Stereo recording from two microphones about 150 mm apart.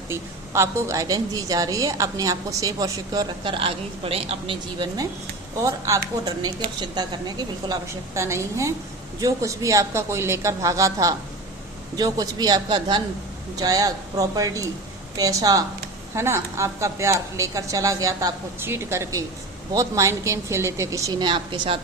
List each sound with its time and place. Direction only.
0.1 s a woman's voice: 15° right (ahead or behind); by 4.9 s 40° right (ahead or behind)
5.5 s a woman's voice: 20° right (ahead or behind)